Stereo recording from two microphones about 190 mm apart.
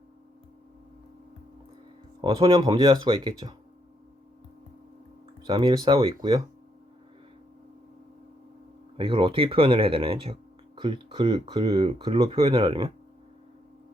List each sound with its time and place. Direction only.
2.2 s speech: 30° right (ahead or behind)
5.5 s speech: 25° right (ahead or behind)
9.0 s speech: 25° right (ahead or behind)